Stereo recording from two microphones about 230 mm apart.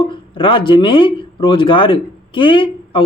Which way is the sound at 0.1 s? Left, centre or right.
Left.